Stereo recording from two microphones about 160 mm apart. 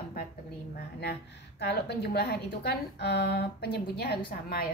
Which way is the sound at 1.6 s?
90° left.